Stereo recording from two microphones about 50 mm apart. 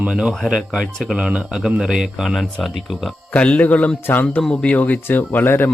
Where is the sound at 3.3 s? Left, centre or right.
Left.